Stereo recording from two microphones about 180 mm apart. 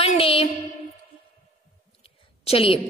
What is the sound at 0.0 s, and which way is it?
Music, 35° left (ahead or behind).